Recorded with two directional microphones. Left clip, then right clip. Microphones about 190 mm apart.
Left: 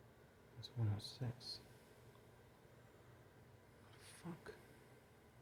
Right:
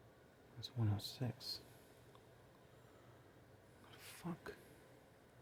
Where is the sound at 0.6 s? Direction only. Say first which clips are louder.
Right 4 dB; 45° right (ahead or behind).